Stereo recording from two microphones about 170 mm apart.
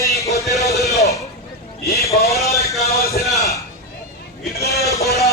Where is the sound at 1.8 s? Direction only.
65° left (ahead or behind).